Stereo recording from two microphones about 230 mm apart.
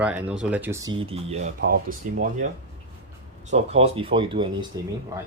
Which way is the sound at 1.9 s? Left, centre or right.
Right.